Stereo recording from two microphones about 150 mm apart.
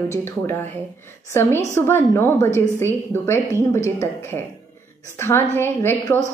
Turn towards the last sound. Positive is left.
turn(degrees=15)  # may be behind; listen again after turning